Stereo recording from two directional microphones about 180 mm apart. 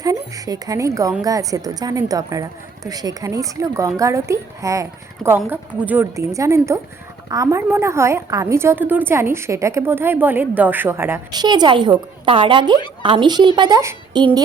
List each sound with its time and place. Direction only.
0.0 s a woman's voice: 20° right (ahead or behind)
11.3 s a woman's voice: 25° right (ahead or behind)